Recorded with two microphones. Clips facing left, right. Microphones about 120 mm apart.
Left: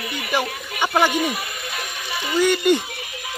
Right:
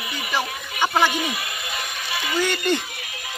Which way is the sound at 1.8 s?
5° left (ahead or behind).